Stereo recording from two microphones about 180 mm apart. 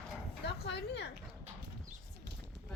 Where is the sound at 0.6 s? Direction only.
65° left (ahead or behind).